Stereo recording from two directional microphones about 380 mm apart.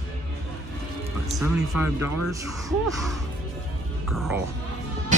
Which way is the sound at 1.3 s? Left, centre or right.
Centre.